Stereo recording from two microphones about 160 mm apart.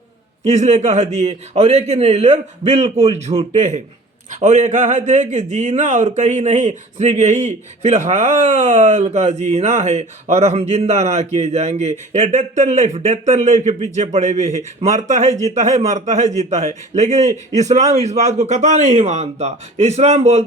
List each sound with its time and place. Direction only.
0.4 s speech: 45° right (ahead or behind)